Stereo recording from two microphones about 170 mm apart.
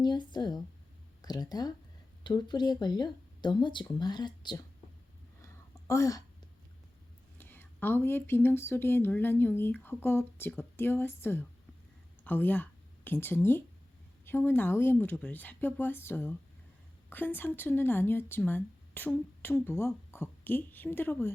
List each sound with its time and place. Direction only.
0.0 s speech: 25° left (ahead or behind)
5.9 s speech: 20° left (ahead or behind)
7.3 s a woman's voice: 10° left (ahead or behind)